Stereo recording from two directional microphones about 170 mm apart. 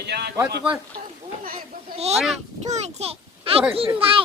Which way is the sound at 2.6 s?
40° right (ahead or behind).